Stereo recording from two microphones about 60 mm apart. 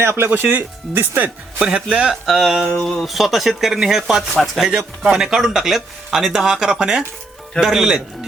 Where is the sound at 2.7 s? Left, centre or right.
Centre.